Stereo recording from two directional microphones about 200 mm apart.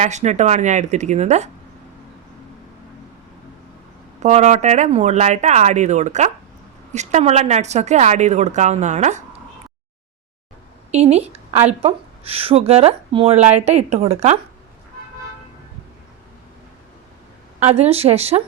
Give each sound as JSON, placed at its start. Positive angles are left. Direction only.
{"t": 0.0, "sound": "a woman's voice", "side_deg": -35}
{"t": 4.2, "sound": "a woman's voice", "side_deg": -35}
{"t": 10.9, "sound": "a woman's voice", "side_deg": -30}
{"t": 17.6, "sound": "a woman's voice", "side_deg": -30}